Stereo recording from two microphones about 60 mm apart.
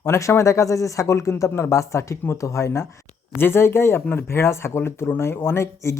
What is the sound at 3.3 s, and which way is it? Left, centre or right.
Speech, left.